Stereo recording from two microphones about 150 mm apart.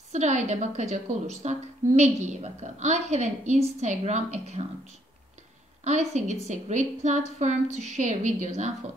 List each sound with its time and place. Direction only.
0.1 s a woman's voice: 50° right (ahead or behind)
5.9 s a woman's voice: 50° right (ahead or behind)